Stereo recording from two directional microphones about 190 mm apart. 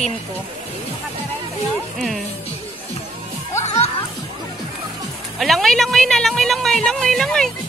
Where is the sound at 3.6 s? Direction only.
35° left (ahead or behind).